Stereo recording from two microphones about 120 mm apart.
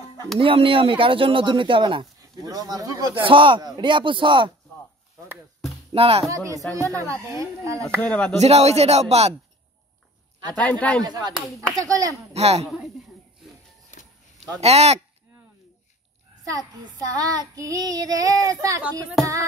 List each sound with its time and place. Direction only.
0.4 s speech: 50° right (ahead or behind)
2.4 s child singing: 30° right (ahead or behind)
3.2 s speech: 45° right (ahead or behind)
5.9 s speech: 55° right (ahead or behind)
6.2 s speech: 25° right (ahead or behind)
8.0 s a man's voice: 10° left (ahead or behind)
8.4 s speech: 65° right (ahead or behind)
10.6 s a man's voice: 10° left (ahead or behind)
11.7 s speech: 30° right (ahead or behind)
12.4 s speech: 60° right (ahead or behind)
12.6 s speech: centre (ahead or behind)
14.6 s speech: 60° right (ahead or behind)
16.4 s child singing: 30° right (ahead or behind)
18.8 s a sound: 10° right (ahead or behind)